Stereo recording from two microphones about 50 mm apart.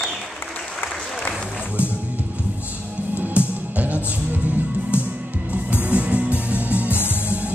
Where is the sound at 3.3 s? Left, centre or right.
Right.